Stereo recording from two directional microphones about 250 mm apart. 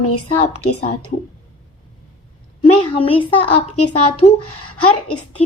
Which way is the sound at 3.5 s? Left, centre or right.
Left.